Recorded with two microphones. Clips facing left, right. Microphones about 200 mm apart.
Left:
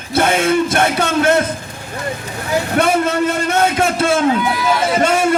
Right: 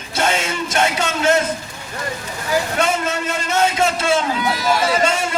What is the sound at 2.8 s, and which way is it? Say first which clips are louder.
A man's voice: left 5 dB; 55° left (ahead or behind).